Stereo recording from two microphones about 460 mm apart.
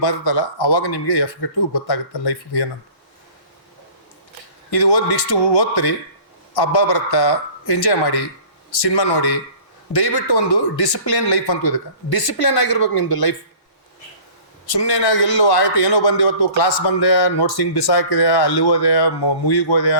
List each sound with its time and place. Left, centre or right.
0.0 s a man's voice: left
4.9 s a man's voice: left
14.8 s a man's voice: left